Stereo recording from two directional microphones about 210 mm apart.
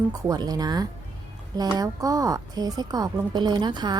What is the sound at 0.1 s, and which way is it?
A woman's voice, 15° right (ahead or behind).